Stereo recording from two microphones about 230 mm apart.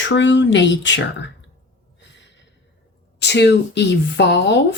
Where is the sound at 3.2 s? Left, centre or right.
Left.